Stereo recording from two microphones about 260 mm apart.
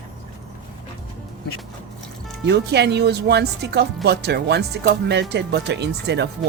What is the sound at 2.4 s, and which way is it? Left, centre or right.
Speech, right.